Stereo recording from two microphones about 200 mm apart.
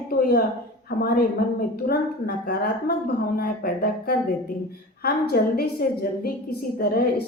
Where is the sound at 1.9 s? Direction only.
50° left (ahead or behind).